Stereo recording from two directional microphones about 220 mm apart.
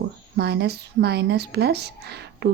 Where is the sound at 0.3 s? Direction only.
50° right (ahead or behind).